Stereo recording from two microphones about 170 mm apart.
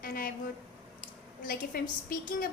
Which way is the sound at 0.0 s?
55° left (ahead or behind).